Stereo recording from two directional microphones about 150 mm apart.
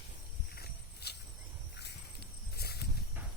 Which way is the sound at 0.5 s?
90° left.